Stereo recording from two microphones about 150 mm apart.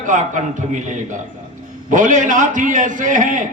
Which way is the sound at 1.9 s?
60° right (ahead or behind).